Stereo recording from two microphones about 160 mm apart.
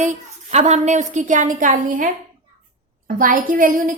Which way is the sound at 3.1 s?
60° right (ahead or behind).